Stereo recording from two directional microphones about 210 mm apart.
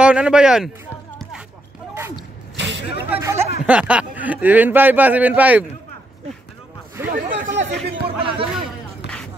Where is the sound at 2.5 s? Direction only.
60° right (ahead or behind).